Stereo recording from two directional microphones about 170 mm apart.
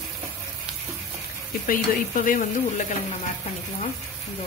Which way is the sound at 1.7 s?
50° left (ahead or behind).